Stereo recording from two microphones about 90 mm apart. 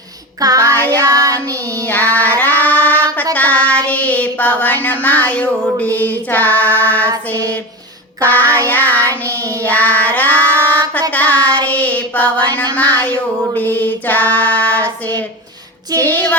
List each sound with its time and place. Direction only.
0.3 s child singing: 40° right (ahead or behind)
0.7 s music: 20° left (ahead or behind)
1.0 s child singing: 40° right (ahead or behind)
1.9 s music: 20° left (ahead or behind)
2.6 s a sound: 20° left (ahead or behind)
3.3 s child singing: 15° left (ahead or behind)
8.2 s music: 20° left (ahead or behind)
9.6 s child singing: 20° left (ahead or behind)
12.7 s music: 20° left (ahead or behind)